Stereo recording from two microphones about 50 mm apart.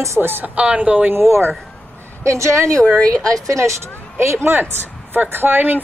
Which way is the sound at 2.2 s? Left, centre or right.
Right.